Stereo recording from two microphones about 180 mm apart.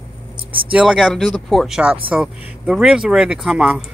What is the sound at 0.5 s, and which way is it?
Speech, 30° right (ahead or behind).